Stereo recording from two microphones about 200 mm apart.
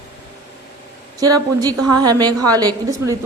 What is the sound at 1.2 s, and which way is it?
A woman's voice, 20° right (ahead or behind).